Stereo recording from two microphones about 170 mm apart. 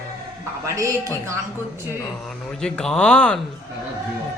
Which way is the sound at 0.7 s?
20° right (ahead or behind).